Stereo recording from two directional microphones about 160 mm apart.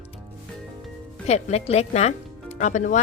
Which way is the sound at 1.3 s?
40° left (ahead or behind).